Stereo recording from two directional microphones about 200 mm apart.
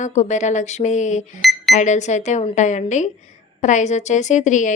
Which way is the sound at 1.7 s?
35° left (ahead or behind).